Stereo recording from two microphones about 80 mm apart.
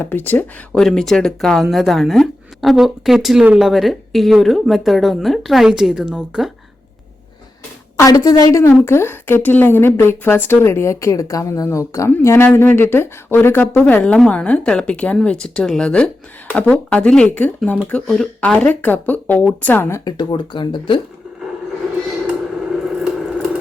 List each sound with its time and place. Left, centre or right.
0.0 s speech: left
0.7 s a woman's voice: centre
8.1 s a woman's voice: left
8.8 s speech: left
14.0 s speech: centre
18.3 s speech: centre
20.1 s speech: left